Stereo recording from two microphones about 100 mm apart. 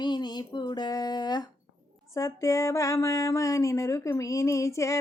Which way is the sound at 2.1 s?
30° left (ahead or behind).